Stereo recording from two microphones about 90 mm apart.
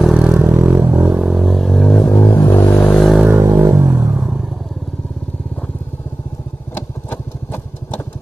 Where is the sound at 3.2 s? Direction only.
25° right (ahead or behind).